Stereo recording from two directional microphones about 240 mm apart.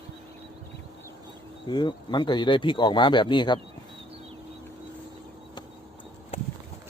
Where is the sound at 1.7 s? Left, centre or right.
Centre.